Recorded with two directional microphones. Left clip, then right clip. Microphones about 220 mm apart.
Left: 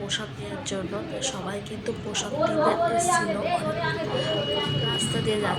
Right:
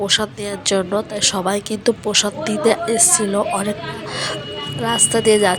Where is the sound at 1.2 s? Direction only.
45° right (ahead or behind).